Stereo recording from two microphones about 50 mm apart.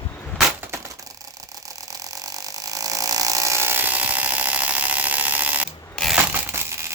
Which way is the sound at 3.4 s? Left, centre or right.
Right.